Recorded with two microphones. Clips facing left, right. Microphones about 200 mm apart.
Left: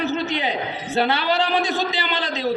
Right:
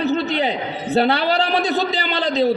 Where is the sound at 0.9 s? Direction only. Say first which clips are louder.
Right 3 dB; 35° right (ahead or behind).